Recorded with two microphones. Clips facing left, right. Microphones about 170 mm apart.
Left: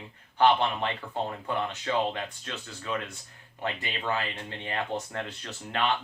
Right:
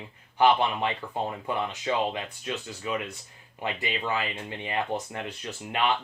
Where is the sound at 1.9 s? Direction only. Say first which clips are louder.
Right 1 dB; 15° right (ahead or behind).